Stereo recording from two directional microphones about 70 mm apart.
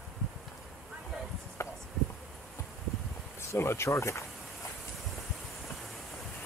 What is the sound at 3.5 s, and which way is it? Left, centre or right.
Speech, left.